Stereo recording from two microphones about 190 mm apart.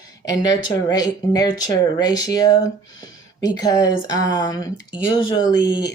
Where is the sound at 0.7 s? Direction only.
20° left (ahead or behind).